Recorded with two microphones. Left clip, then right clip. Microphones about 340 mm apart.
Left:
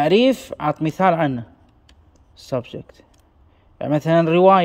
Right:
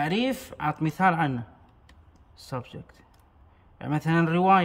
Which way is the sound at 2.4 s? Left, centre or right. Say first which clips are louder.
Left 11 dB; centre.